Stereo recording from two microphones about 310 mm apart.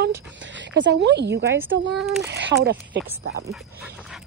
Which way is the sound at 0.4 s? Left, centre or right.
Right.